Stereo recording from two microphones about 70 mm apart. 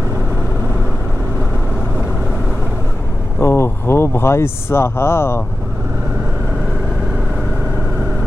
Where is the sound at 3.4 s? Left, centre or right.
Left.